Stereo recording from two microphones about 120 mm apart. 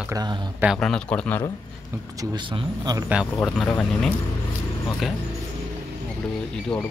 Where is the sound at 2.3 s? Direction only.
45° right (ahead or behind).